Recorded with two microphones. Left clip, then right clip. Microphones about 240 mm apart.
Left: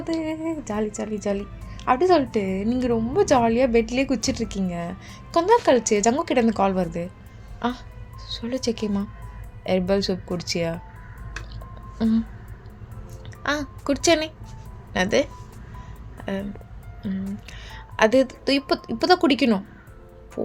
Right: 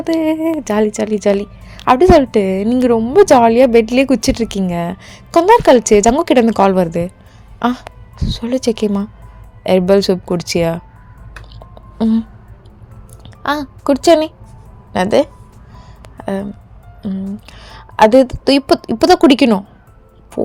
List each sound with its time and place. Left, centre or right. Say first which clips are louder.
0.0 s a woman's voice: right 12 dB; right
11.7 s a sound: right 8 dB; right
13.4 s a woman's voice: right 8 dB; right